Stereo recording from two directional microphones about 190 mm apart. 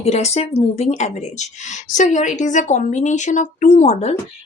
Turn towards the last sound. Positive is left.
turn(degrees=35)  # may be behind; listen again after turning